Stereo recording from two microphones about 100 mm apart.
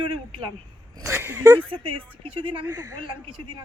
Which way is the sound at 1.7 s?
60° right (ahead or behind).